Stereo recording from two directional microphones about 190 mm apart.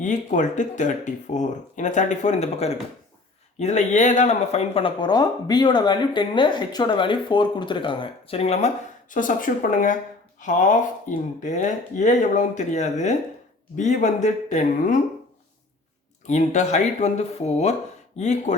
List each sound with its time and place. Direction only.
0.0 s speech: 40° left (ahead or behind)
16.2 s speech: 35° left (ahead or behind)